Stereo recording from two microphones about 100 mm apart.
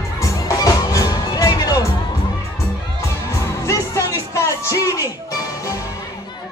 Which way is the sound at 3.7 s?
30° left (ahead or behind).